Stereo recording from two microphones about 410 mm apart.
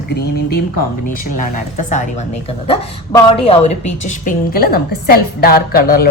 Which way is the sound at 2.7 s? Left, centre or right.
Centre.